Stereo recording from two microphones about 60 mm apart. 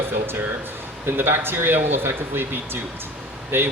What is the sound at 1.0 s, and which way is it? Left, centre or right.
A man's voice, right.